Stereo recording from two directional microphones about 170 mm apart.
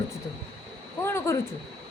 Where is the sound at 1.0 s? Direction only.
15° left (ahead or behind).